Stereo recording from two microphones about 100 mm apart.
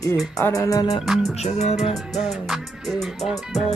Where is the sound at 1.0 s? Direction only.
Centre (ahead or behind).